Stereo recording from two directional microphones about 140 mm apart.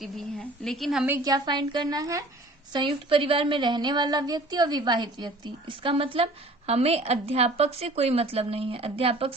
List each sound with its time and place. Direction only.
0.3 s a woman's voice: 5° left (ahead or behind)
1.2 s speech: 30° right (ahead or behind)
2.7 s a woman's voice: 35° right (ahead or behind)